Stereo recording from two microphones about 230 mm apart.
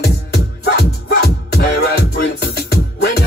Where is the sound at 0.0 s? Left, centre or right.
Left.